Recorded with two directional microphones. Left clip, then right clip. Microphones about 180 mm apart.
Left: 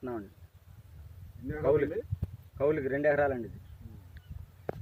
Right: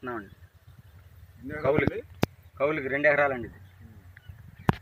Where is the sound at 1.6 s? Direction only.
25° right (ahead or behind).